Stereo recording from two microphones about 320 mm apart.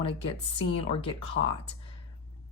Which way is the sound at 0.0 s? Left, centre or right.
Centre.